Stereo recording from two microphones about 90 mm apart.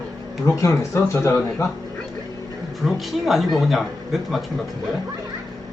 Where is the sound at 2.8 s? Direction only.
Centre (ahead or behind).